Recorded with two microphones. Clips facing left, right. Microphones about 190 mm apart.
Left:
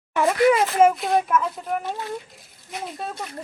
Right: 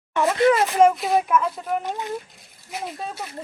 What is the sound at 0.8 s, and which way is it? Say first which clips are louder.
Speech: right 1 dB; centre (ahead or behind).